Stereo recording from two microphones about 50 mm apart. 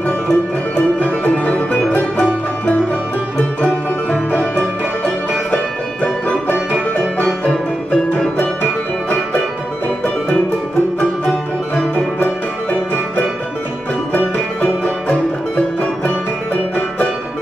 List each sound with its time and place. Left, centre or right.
0.3 s music: left
11.0 s music: centre
14.6 s music: left